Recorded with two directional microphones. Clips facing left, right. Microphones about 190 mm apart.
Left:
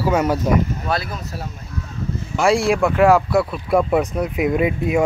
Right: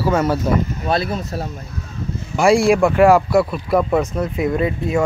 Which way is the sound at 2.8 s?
5° right (ahead or behind).